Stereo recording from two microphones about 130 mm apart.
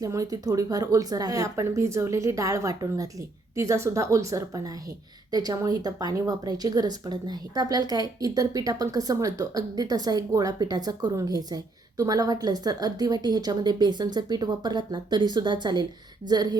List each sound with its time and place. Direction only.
0.0 s a woman's voice: 25° right (ahead or behind)